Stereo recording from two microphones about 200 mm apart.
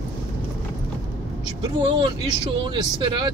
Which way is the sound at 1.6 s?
20° right (ahead or behind).